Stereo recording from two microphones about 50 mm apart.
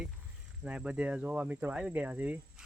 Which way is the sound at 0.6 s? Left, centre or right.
Centre.